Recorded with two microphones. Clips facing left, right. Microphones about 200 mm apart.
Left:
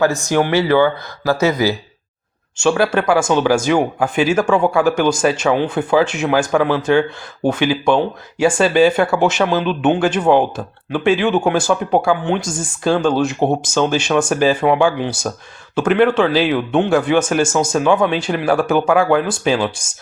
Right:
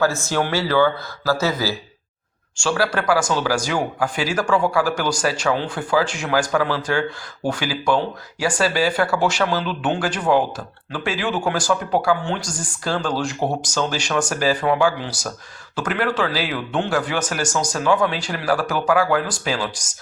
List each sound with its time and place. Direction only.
0.0 s speech: 15° left (ahead or behind)